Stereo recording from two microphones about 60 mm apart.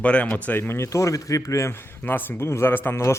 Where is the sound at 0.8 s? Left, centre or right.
Left.